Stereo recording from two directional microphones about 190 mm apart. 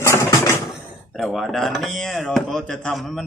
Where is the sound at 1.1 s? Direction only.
Centre (ahead or behind).